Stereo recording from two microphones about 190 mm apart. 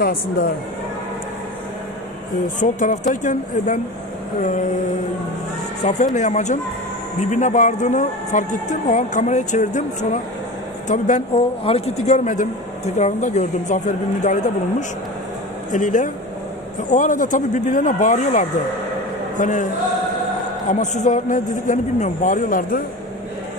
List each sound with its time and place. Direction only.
2.6 s speech: 40° left (ahead or behind)
5.9 s a man's voice: 40° left (ahead or behind)
20.8 s a man's voice: 40° left (ahead or behind)